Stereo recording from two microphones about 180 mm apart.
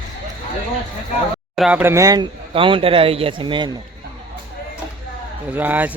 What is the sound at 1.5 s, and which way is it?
Speech, 5° right (ahead or behind).